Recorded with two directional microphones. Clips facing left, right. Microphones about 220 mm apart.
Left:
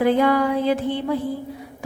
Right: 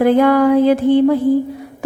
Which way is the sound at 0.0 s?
50° right (ahead or behind).